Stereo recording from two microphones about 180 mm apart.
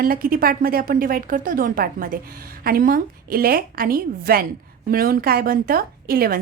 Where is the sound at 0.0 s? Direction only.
55° right (ahead or behind).